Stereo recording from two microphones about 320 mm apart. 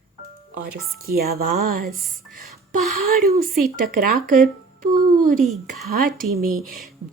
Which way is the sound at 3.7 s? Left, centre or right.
Right.